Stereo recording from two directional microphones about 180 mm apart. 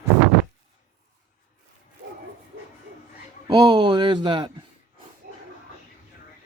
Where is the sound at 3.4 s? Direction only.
20° right (ahead or behind).